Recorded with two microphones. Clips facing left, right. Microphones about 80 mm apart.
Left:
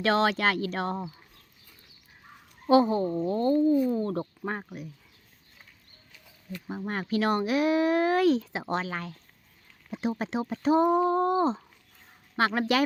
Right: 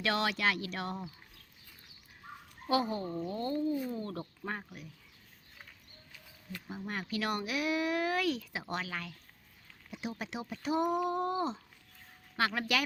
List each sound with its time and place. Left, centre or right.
0.0 s speech: left
2.6 s speech: left
6.7 s speech: left